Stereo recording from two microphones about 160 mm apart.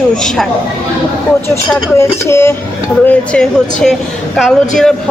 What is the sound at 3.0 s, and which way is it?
A woman's voice, 5° left (ahead or behind).